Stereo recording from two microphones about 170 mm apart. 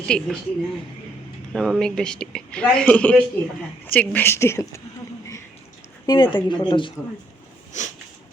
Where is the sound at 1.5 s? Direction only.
5° left (ahead or behind).